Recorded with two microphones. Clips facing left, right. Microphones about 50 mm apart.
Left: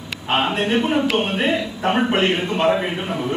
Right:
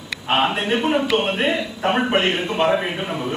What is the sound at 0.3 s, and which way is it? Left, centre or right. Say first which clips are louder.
A man's voice: even; centre.